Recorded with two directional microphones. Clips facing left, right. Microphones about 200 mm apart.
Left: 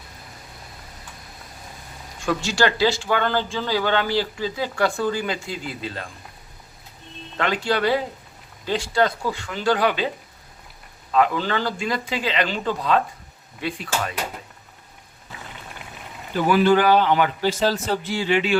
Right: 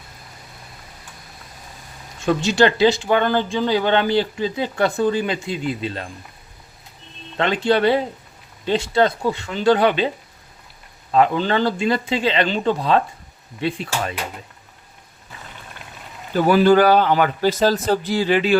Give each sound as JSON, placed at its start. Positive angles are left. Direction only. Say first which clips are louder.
{"t": 2.2, "sound": "speech", "louder": "right 5 dB", "side_deg": -20}
{"t": 7.3, "sound": "speech", "louder": "right 5 dB", "side_deg": -25}
{"t": 11.1, "sound": "speech", "louder": "right 3 dB", "side_deg": -30}
{"t": 16.3, "sound": "speech", "louder": "right 3 dB", "side_deg": -40}